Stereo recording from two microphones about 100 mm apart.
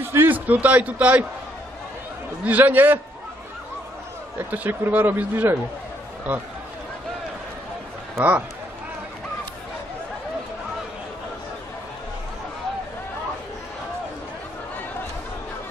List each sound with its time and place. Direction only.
0.0 s a man's voice: 25° right (ahead or behind)
2.4 s a man's voice: 15° right (ahead or behind)
4.4 s speech: 20° right (ahead or behind)
8.2 s a man's voice: 15° right (ahead or behind)